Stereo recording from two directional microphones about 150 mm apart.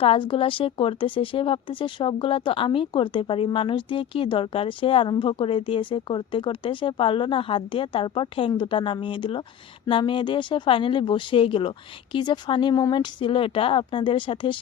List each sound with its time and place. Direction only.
0.0 s speech: 35° left (ahead or behind)